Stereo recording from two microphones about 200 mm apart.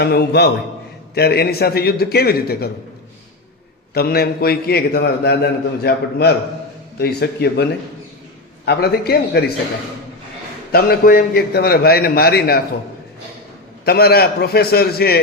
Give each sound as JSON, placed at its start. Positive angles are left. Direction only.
{"t": 0.0, "sound": "a man's voice", "side_deg": 55}
{"t": 3.9, "sound": "a man's voice", "side_deg": 50}
{"t": 10.7, "sound": "a man's voice", "side_deg": 50}
{"t": 13.8, "sound": "a man's voice", "side_deg": 50}